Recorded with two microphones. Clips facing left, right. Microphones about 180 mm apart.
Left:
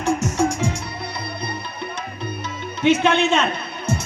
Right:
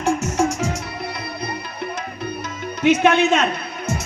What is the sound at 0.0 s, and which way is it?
Music, 35° left (ahead or behind).